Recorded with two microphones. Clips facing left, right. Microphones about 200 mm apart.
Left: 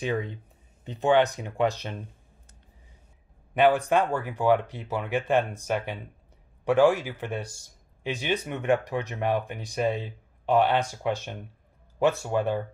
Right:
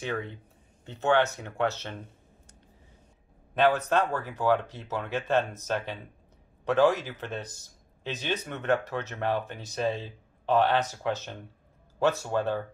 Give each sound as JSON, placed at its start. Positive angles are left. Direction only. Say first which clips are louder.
{"t": 0.0, "sound": "speech", "louder": "left 4 dB", "side_deg": 15}
{"t": 3.5, "sound": "speech", "louder": "left 3 dB", "side_deg": 15}